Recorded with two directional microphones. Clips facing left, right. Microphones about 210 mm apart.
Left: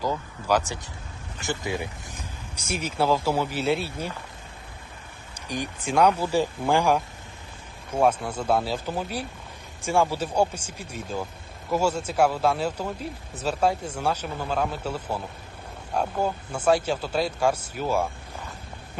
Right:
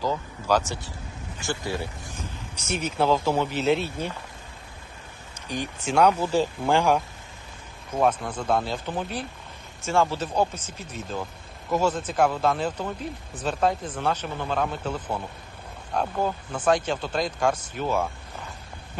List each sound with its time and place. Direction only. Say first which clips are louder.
0.0 s vehicle: right 1 dB; 10° left (ahead or behind)
1.5 s speech: left 1 dB; 20° left (ahead or behind)
5.5 s speech: even; 10° left (ahead or behind)
7.9 s speech: left 1 dB; 10° left (ahead or behind)